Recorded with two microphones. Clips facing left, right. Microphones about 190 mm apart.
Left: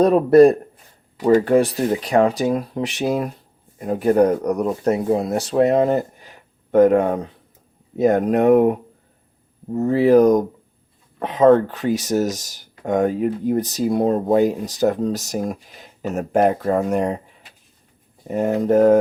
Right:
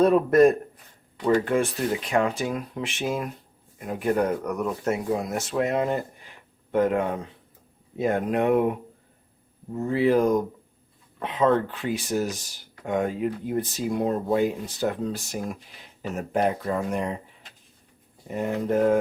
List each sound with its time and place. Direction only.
0.0 s speech: 35° left (ahead or behind)
9.7 s speech: 40° left (ahead or behind)
18.3 s speech: 45° left (ahead or behind)